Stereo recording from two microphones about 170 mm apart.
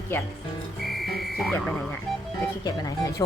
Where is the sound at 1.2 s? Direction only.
Centre (ahead or behind).